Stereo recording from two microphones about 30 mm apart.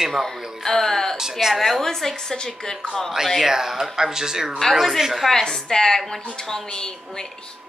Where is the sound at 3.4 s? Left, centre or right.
Centre.